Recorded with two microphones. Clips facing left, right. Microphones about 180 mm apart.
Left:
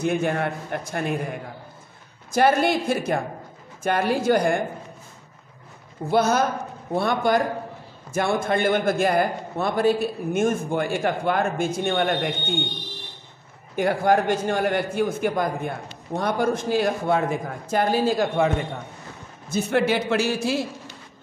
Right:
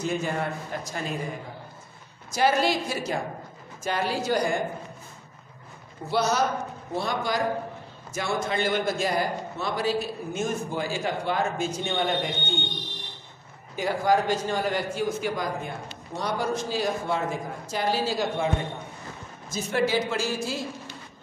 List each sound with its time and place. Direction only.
0.0 s a man's voice: 60° left (ahead or behind)
6.0 s a man's voice: 50° left (ahead or behind)
13.7 s a man's voice: 60° left (ahead or behind)
19.5 s a man's voice: 60° left (ahead or behind)